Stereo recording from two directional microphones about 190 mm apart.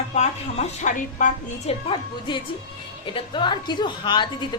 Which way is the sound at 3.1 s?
25° left (ahead or behind).